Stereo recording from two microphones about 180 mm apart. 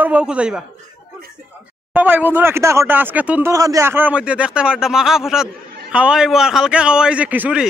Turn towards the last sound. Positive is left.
turn(degrees=-5)  # may be behind; listen again after turning